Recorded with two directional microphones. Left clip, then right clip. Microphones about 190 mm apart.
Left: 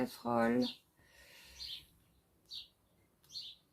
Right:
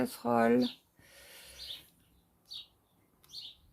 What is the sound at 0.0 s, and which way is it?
Speech, 50° right (ahead or behind).